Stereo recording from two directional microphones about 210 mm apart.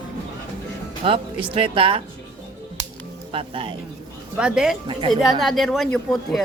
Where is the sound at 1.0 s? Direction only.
25° right (ahead or behind).